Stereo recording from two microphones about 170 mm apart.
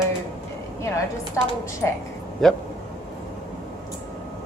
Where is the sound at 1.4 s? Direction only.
15° left (ahead or behind).